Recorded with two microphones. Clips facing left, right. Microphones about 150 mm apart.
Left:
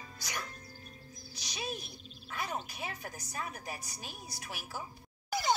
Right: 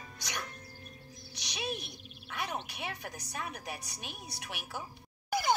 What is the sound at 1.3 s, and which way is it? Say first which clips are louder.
Music: right 2 dB; 65° right (ahead or behind).